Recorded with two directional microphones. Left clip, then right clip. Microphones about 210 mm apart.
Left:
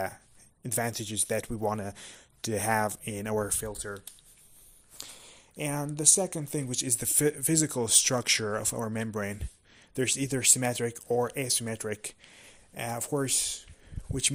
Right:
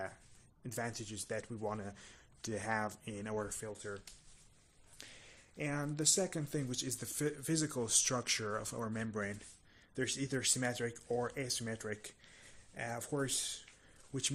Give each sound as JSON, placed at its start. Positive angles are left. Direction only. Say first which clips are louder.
{"t": 0.6, "sound": "speech", "louder": "left 10 dB", "side_deg": 40}
{"t": 4.9, "sound": "speech", "louder": "left 8 dB", "side_deg": 35}